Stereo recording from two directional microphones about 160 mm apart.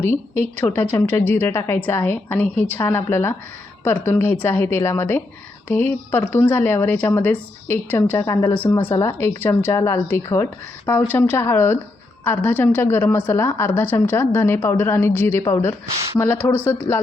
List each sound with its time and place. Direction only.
0.8 s a woman's voice: 15° left (ahead or behind)